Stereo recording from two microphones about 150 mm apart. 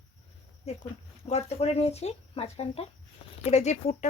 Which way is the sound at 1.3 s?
45° left (ahead or behind).